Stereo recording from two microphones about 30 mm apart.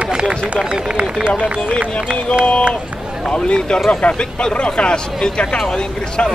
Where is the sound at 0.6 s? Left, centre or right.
Right.